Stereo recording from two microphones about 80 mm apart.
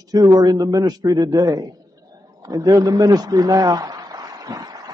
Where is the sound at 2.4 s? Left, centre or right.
Right.